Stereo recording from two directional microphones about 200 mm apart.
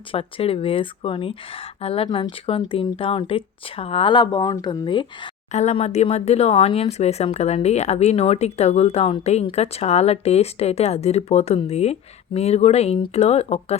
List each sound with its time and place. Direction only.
0.1 s speech: 25° left (ahead or behind)
5.5 s speech: 35° left (ahead or behind)